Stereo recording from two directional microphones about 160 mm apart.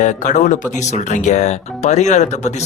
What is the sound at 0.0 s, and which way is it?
Speech, 50° left (ahead or behind).